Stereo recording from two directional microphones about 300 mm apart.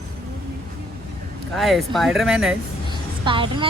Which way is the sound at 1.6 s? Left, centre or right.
Centre.